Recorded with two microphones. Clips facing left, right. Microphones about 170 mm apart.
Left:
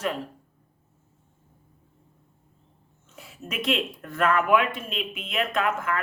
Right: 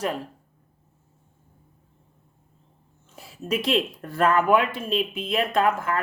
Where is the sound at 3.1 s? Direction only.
35° right (ahead or behind).